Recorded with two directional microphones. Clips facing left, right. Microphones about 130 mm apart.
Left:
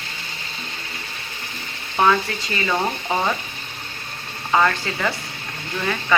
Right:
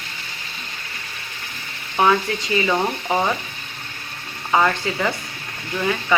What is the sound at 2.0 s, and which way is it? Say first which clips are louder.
A woman's voice: right 1 dB; 15° right (ahead or behind).